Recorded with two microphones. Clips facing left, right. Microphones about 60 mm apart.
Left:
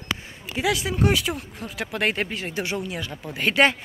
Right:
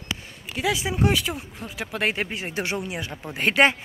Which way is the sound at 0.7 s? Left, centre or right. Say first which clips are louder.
Left 1 dB; centre.